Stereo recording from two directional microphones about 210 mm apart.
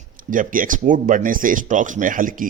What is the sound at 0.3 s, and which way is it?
Speech, 40° right (ahead or behind).